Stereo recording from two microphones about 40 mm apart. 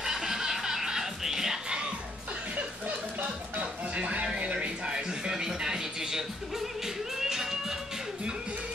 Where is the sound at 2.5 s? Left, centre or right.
Right; by 7.7 s centre.